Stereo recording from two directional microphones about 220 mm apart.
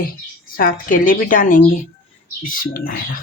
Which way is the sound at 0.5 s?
40° left (ahead or behind).